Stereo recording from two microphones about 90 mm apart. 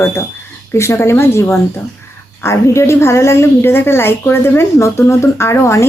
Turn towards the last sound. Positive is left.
turn(degrees=30)  # may be behind; listen again after turning